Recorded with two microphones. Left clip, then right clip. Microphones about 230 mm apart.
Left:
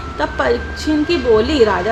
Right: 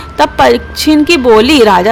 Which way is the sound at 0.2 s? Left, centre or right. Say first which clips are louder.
Right 10 dB; right.